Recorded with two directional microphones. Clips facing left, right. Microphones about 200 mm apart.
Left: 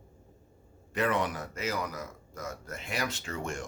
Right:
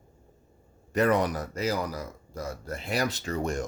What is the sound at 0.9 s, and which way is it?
Speech, 40° right (ahead or behind).